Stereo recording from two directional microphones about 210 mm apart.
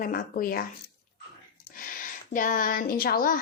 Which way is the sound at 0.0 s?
40° left (ahead or behind).